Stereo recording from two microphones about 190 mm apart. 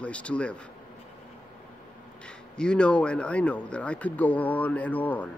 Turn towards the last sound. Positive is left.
turn(degrees=10)  # may be behind; listen again after turning